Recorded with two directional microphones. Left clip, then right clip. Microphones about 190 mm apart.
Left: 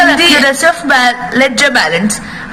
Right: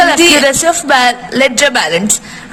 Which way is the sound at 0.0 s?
30° right (ahead or behind).